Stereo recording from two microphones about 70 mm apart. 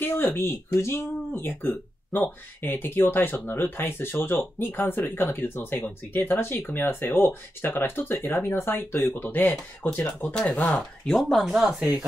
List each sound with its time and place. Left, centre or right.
0.0 s speech: left
11.1 s speech: centre